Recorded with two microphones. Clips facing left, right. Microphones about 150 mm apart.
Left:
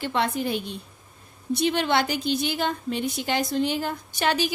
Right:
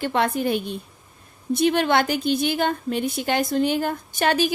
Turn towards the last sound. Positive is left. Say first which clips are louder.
# right 4 dB
turn(degrees=-50)  # may be behind; listen again after turning